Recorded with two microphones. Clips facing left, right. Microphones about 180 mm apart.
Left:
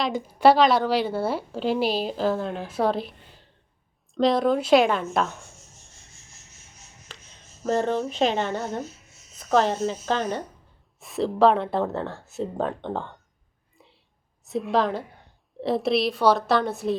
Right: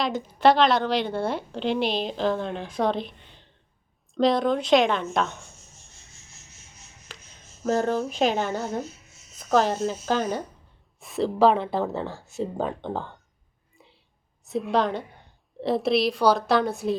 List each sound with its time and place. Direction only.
0.0 s a woman's voice: centre (ahead or behind)
7.6 s a woman's voice: centre (ahead or behind)
13.7 s a sound: centre (ahead or behind)
14.4 s a woman's voice: centre (ahead or behind)